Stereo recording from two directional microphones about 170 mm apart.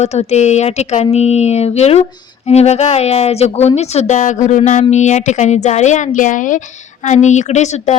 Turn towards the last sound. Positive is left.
turn(degrees=45)  # may be behind; listen again after turning